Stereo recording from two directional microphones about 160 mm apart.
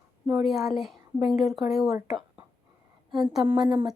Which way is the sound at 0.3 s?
5° right (ahead or behind).